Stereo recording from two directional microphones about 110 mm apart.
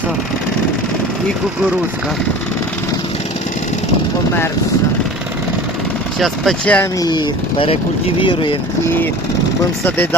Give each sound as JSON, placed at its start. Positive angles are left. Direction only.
{"t": 6.1, "sound": "speech", "side_deg": 0}
{"t": 7.0, "sound": "speech", "side_deg": 40}
{"t": 9.8, "sound": "speech", "side_deg": 15}